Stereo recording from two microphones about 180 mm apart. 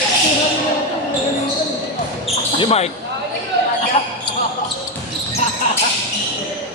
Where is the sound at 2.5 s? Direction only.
35° left (ahead or behind).